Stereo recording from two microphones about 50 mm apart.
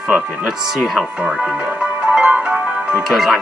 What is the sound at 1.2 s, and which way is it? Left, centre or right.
Speech, right.